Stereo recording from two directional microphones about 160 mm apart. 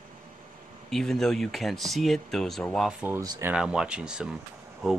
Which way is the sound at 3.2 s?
25° right (ahead or behind).